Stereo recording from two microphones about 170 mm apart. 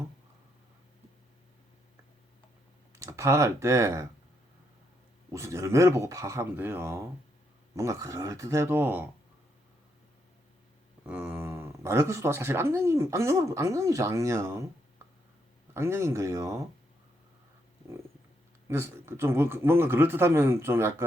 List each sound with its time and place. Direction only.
3.0 s speech: 15° right (ahead or behind)
5.3 s speech: 20° right (ahead or behind)
11.0 s speech: 10° right (ahead or behind)
15.7 s speech: 15° right (ahead or behind)
18.7 s speech: 15° right (ahead or behind)